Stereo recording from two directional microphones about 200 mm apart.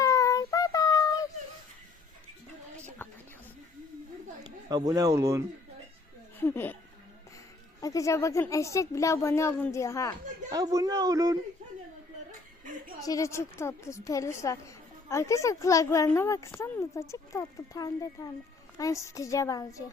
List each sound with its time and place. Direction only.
0.0 s child singing: 15° left (ahead or behind)
2.7 s a sound: 5° left (ahead or behind)
4.9 s a man's voice: 20° right (ahead or behind)
6.4 s a woman's voice: 10° left (ahead or behind)
7.8 s a woman's voice: 15° left (ahead or behind)
10.5 s a man's voice: 15° right (ahead or behind)
13.0 s a woman's voice: 15° left (ahead or behind)